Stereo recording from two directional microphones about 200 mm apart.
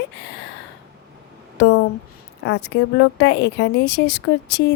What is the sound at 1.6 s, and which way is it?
Speech, 60° left (ahead or behind).